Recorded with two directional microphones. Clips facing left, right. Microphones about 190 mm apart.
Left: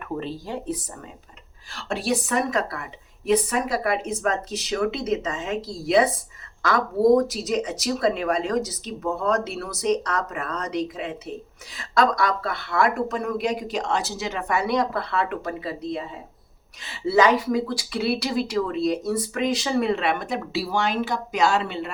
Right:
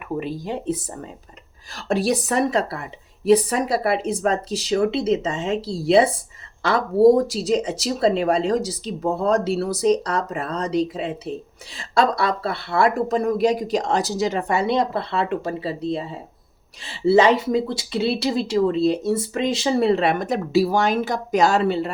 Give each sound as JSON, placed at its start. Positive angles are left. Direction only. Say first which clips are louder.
{"t": 0.2, "sound": "speech", "louder": "right 3 dB", "side_deg": -15}
{"t": 1.7, "sound": "speech", "louder": "right 4 dB", "side_deg": -40}